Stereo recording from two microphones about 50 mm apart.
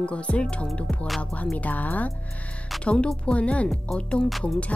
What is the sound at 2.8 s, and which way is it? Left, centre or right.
Speech, left.